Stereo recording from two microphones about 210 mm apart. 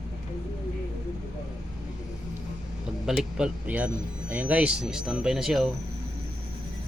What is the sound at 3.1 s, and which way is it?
Speech, 5° right (ahead or behind).